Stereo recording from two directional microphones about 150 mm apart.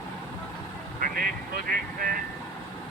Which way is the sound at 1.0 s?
70° right (ahead or behind).